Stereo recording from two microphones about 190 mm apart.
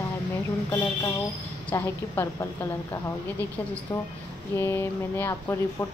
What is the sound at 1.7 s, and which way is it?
Speech, 15° left (ahead or behind).